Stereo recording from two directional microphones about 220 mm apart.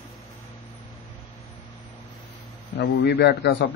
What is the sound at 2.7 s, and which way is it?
Speech, 50° left (ahead or behind).